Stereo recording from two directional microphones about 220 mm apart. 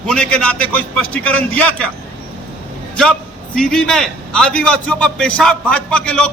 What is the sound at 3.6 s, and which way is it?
A man's voice, 5° left (ahead or behind).